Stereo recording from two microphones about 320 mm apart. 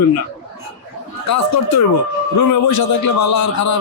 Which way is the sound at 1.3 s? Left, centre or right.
Left.